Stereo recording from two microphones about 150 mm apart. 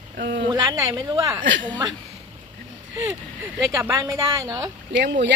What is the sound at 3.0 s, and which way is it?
A woman's voice, 15° right (ahead or behind).